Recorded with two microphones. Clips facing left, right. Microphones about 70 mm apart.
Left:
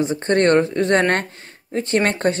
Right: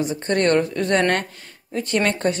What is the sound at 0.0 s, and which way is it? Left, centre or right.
Speech, left.